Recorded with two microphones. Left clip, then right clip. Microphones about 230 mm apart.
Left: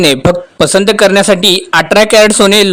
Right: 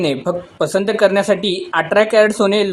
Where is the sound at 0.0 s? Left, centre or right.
Left.